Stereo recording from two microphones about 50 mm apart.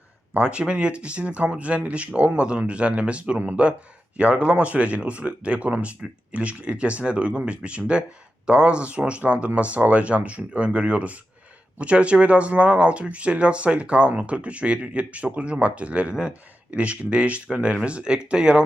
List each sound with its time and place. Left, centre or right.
0.3 s speech: right